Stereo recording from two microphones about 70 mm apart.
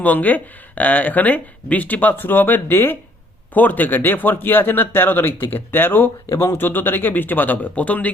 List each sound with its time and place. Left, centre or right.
0.0 s speech: left